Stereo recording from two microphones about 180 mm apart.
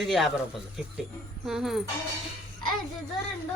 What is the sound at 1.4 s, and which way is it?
Speech, centre (ahead or behind).